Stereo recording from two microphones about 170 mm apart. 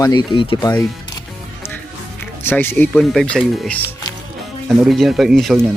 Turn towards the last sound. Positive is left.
turn(degrees=0)  # may be behind; listen again after turning